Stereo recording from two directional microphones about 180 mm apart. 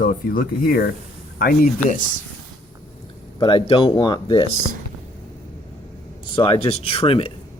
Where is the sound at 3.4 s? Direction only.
30° left (ahead or behind).